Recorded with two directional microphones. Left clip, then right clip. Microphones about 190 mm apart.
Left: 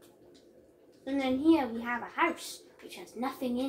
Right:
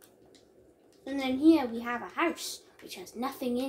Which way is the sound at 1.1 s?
60° right (ahead or behind).